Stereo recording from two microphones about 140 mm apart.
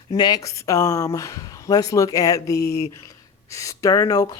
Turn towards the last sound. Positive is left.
turn(degrees=25)  # may be behind; listen again after turning